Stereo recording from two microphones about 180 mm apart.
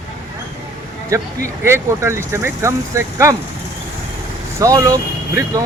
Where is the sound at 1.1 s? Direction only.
15° right (ahead or behind).